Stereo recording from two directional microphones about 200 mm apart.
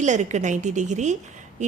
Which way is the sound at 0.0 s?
35° right (ahead or behind).